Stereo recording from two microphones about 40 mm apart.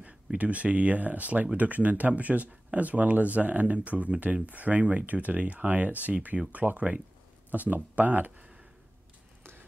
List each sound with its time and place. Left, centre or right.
0.4 s speech: right